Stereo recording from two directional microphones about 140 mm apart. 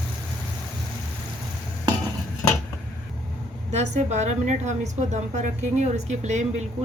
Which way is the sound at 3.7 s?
55° right (ahead or behind).